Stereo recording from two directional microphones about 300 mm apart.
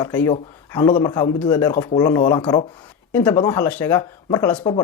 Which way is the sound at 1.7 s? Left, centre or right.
Left.